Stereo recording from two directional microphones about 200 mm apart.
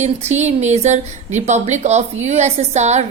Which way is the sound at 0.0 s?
35° right (ahead or behind).